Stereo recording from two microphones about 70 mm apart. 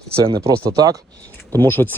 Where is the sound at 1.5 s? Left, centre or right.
Left.